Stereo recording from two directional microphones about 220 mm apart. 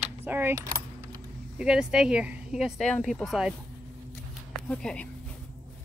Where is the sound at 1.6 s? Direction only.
5° right (ahead or behind).